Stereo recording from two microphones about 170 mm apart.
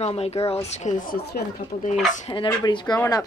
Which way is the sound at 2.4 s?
25° left (ahead or behind).